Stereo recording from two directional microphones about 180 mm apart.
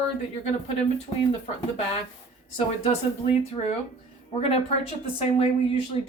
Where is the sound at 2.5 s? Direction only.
35° left (ahead or behind).